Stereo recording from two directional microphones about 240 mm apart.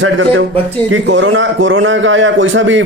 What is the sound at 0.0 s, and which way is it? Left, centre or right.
A man's voice, right.